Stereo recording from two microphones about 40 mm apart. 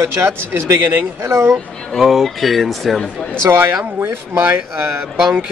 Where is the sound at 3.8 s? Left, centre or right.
Right.